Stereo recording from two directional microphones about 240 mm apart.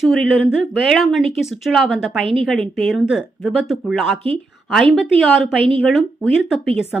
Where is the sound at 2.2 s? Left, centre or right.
Right.